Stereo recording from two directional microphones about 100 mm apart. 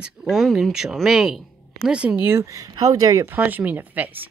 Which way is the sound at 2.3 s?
30° right (ahead or behind).